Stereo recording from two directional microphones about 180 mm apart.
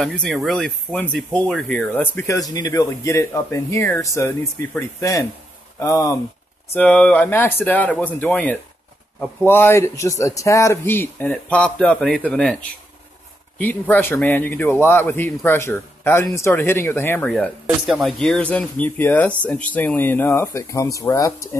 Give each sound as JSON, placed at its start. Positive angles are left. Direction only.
{"t": 0.0, "sound": "speech", "side_deg": 5}
{"t": 13.6, "sound": "speech", "side_deg": 10}
{"t": 17.3, "sound": "speech", "side_deg": 0}